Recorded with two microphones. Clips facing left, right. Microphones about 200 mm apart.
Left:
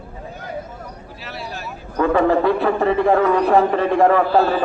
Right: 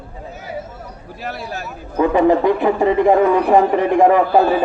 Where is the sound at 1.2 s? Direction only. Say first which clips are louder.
Right 5 dB; 50° right (ahead or behind).